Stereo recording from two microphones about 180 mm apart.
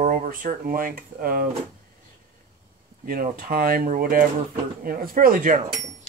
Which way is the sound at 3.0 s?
55° right (ahead or behind).